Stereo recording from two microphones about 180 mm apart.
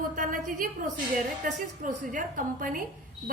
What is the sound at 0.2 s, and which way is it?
A woman's voice, 45° right (ahead or behind).